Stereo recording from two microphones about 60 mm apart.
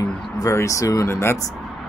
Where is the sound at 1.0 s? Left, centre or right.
Left.